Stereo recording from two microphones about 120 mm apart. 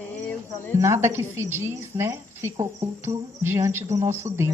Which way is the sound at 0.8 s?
25° right (ahead or behind).